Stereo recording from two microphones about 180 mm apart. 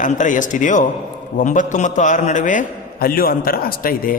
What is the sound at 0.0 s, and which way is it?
A man's voice, 45° left (ahead or behind).